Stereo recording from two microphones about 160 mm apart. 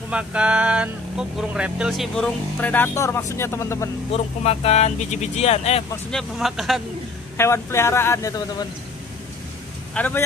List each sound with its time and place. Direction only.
0.1 s speech: 5° right (ahead or behind); by 3.9 s 15° left (ahead or behind)
4.1 s speech: 40° left (ahead or behind)
6.1 s speech: centre (ahead or behind)
7.3 s speech: 15° left (ahead or behind)
9.9 s speech: 10° left (ahead or behind)